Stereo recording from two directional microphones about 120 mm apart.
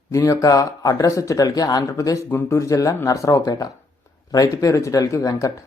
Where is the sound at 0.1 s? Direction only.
25° left (ahead or behind).